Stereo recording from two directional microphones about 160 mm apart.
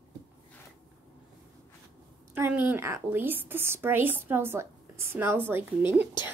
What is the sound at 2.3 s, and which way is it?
A woman's voice, 15° right (ahead or behind).